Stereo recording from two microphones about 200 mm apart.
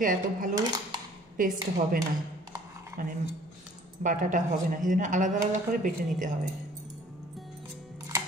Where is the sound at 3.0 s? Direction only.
45° right (ahead or behind).